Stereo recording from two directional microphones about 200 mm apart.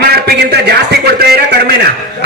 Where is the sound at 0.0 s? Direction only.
50° right (ahead or behind).